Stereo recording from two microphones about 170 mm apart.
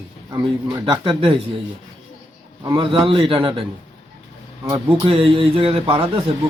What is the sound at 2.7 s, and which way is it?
Speech, 25° right (ahead or behind).